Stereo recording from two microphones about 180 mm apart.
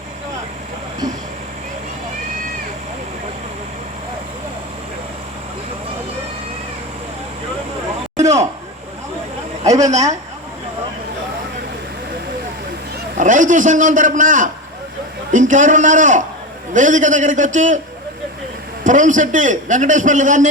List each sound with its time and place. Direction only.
8.2 s speech: 40° right (ahead or behind)
9.8 s speech: 40° right (ahead or behind)
13.1 s a man's voice: 45° right (ahead or behind)
18.9 s a man's voice: 45° right (ahead or behind)